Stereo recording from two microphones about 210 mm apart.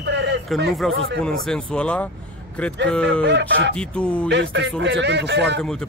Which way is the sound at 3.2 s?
55° right (ahead or behind).